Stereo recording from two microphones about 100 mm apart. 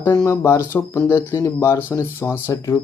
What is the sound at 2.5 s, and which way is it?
Speech, 30° left (ahead or behind).